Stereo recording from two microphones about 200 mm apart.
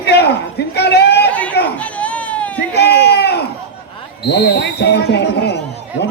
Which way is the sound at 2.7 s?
55° left (ahead or behind).